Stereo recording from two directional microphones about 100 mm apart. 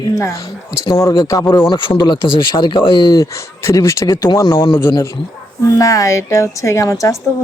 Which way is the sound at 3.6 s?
30° left (ahead or behind).